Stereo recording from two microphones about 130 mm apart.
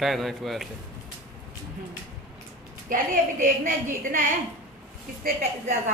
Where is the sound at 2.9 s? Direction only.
90° right.